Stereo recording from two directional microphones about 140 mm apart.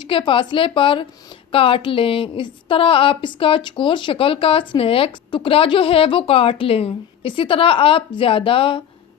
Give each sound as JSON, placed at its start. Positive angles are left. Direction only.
{"t": 0.1, "sound": "a woman's voice", "side_deg": 35}